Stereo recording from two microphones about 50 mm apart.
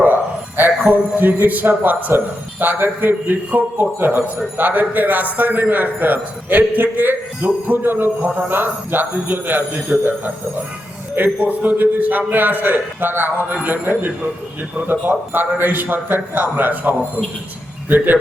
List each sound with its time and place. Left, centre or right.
0.0 s a man's voice: right